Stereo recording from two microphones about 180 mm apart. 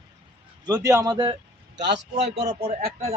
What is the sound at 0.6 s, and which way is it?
Speech, 20° right (ahead or behind).